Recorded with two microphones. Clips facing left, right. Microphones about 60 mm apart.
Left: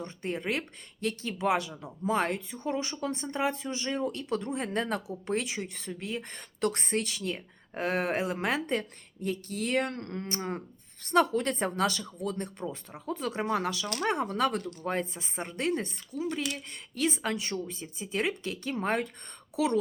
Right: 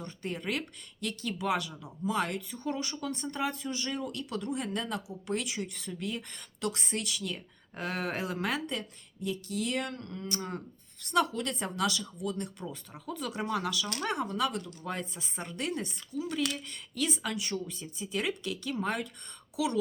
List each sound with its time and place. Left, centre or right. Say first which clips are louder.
0.0 s speech: left 3 dB; left
5.3 s speech: left 2 dB; left
10.3 s speech: left 3 dB; left